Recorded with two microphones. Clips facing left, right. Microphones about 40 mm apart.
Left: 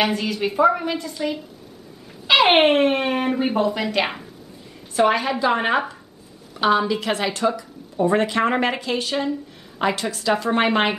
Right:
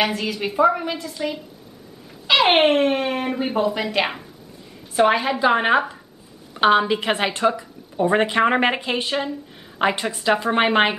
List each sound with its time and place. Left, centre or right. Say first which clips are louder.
0.0 s a woman's voice: left 1 dB; centre
6.5 s a woman's voice: right 2 dB; right